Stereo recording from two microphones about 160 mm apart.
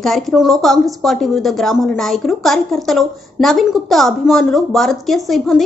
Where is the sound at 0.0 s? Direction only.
Centre (ahead or behind).